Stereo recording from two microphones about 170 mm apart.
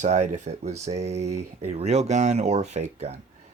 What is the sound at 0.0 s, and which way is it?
Speech, 45° right (ahead or behind).